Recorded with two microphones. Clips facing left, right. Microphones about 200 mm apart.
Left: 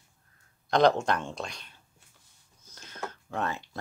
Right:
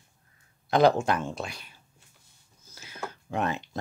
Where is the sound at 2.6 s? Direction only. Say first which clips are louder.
Right 1 dB; 5° right (ahead or behind).